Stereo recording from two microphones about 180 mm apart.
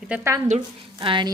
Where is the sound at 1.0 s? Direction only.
25° right (ahead or behind).